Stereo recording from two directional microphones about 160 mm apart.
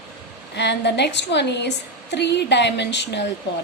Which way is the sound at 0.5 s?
90° left.